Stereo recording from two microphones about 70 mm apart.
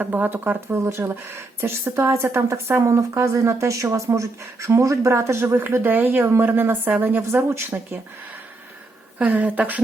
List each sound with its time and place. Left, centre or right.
0.0 s speech: right
9.1 s speech: right